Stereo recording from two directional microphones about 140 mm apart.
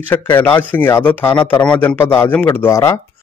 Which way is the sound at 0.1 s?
15° left (ahead or behind).